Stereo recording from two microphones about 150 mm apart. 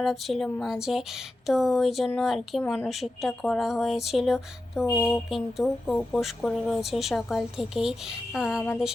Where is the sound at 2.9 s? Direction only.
Centre (ahead or behind).